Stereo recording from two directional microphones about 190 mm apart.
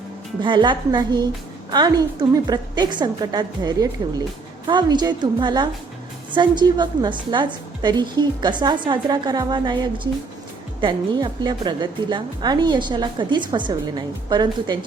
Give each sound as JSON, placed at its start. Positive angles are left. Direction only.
{"t": 0.4, "sound": "a woman's voice", "side_deg": -25}